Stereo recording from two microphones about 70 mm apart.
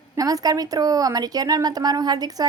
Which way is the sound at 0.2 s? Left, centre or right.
Right.